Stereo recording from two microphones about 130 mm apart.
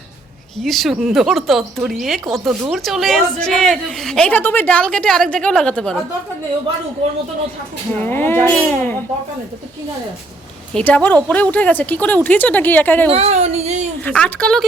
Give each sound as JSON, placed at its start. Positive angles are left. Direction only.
{"t": 0.6, "sound": "a woman's voice", "side_deg": 0}
{"t": 7.9, "sound": "speech", "side_deg": 15}
{"t": 10.8, "sound": "speech", "side_deg": 10}
{"t": 13.1, "sound": "speech", "side_deg": -55}
{"t": 14.0, "sound": "speech", "side_deg": 10}